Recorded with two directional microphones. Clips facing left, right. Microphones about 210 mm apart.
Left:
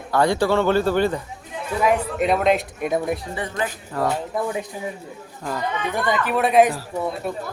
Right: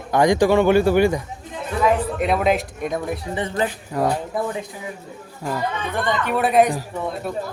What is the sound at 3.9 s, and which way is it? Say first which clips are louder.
Speech: right 2 dB; 15° right (ahead or behind).